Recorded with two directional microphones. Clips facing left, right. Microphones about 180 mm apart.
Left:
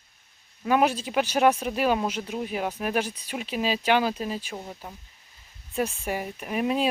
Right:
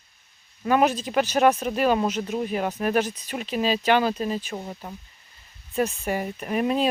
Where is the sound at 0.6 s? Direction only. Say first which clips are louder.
Right 2 dB; 10° left (ahead or behind).